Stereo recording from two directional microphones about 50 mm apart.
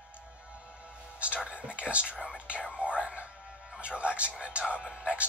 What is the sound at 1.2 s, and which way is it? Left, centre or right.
Music, right.